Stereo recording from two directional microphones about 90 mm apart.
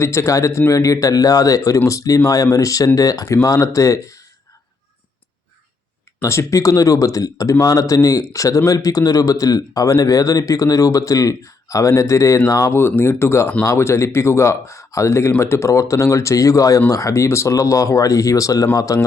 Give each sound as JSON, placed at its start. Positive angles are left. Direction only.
{"t": 0.0, "sound": "speech", "side_deg": 30}
{"t": 6.2, "sound": "speech", "side_deg": 35}
{"t": 12.8, "sound": "speech", "side_deg": 25}